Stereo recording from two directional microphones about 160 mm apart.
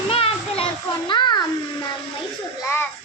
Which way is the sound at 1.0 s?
30° left (ahead or behind).